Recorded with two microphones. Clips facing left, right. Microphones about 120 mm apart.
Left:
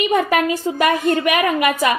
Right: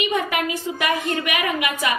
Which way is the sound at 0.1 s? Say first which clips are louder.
Left 6 dB; 40° left (ahead or behind).